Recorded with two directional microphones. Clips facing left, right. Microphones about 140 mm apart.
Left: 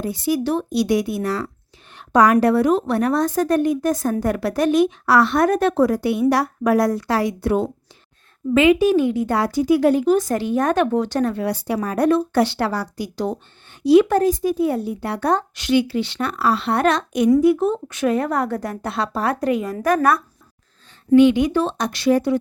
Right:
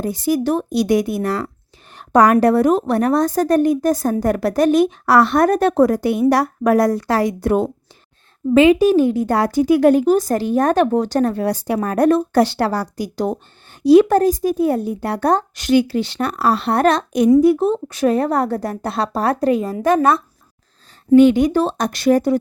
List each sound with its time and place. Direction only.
0.0 s a woman's voice: 45° right (ahead or behind)
8.5 s speech: 30° right (ahead or behind)
21.2 s speech: 40° right (ahead or behind)